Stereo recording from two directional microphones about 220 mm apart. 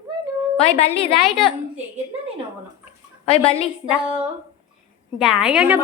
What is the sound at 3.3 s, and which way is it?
Speech, 25° left (ahead or behind).